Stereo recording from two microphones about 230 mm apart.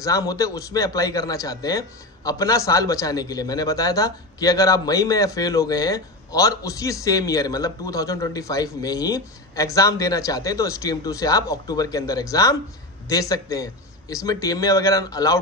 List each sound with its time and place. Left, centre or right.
0.0 s a man's voice: centre